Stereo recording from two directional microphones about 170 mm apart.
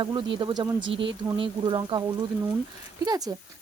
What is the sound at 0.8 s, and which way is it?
Speech, 90° right.